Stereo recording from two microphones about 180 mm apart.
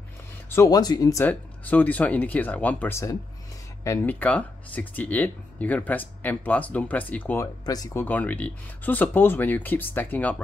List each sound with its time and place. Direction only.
0.5 s speech: 20° left (ahead or behind)
1.2 s speech: 10° left (ahead or behind)
7.6 s speech: 20° left (ahead or behind)
8.0 s speech: 10° left (ahead or behind)